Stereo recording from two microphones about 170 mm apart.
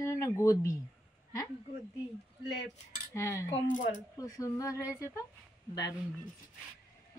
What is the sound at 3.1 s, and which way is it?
Speech, 20° left (ahead or behind).